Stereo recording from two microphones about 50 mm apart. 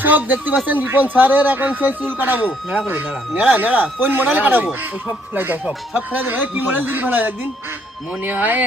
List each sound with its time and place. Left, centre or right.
0.0 s speech: right